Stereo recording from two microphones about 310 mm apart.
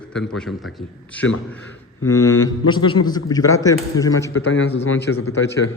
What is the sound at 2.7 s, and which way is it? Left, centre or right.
A man's voice, centre.